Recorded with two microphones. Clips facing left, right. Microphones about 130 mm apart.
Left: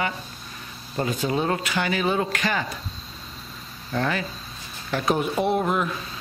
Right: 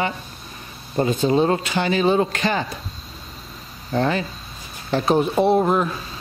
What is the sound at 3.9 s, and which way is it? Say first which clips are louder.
Speech: right 5 dB; 30° right (ahead or behind).